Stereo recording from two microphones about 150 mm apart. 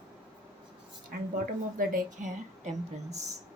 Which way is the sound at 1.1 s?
80° right.